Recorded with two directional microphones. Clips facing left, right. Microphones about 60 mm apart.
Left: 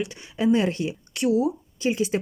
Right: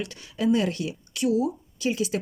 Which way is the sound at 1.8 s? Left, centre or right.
Left.